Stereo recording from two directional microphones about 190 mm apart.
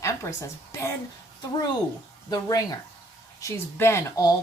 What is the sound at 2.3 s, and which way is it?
A woman's voice, 20° left (ahead or behind).